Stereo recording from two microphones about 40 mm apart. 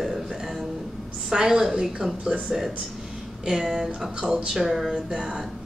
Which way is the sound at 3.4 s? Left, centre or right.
Centre.